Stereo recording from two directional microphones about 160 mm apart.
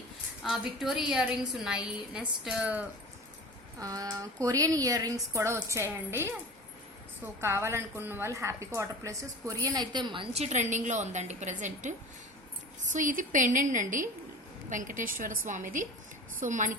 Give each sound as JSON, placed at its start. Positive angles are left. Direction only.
{"t": 0.4, "sound": "a woman's voice", "side_deg": 0}
{"t": 3.8, "sound": "speech", "side_deg": -20}
{"t": 7.4, "sound": "a woman's voice", "side_deg": -15}